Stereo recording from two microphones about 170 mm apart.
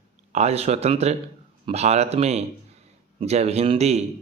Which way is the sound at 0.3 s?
40° right (ahead or behind).